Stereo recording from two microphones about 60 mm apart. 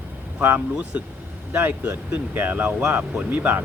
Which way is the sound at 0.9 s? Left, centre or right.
Right.